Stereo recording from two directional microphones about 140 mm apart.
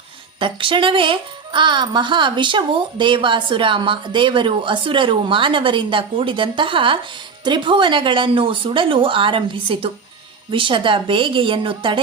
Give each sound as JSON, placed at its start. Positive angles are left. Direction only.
{"t": 0.3, "sound": "speech", "side_deg": -40}